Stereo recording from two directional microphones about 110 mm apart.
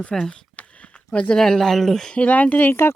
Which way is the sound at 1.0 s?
10° left (ahead or behind).